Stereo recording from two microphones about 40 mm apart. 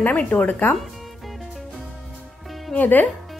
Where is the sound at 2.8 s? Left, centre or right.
Left.